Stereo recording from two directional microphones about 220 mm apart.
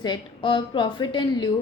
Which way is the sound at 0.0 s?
20° left (ahead or behind).